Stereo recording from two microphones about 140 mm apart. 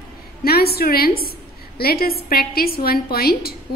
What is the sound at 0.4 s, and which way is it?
A woman's voice, 90° left.